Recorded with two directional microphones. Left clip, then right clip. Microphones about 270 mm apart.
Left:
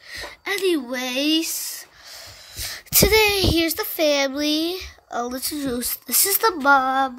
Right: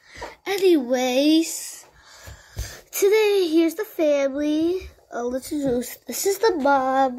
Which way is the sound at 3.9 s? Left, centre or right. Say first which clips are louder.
Left 2 dB; left.